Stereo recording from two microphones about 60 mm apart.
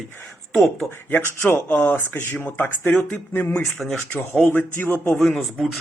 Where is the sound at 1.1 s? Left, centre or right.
Left.